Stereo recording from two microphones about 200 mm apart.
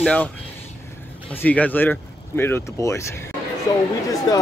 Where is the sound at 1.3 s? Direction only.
10° left (ahead or behind).